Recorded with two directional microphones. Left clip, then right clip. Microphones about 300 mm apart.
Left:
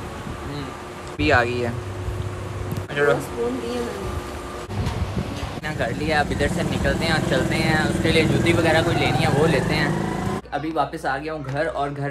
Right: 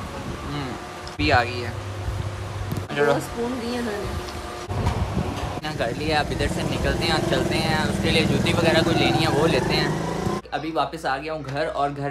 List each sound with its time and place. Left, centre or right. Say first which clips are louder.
1.1 s speech: left 2 dB; centre
2.9 s speech: left 1 dB; centre
5.8 s speech: left 2 dB; centre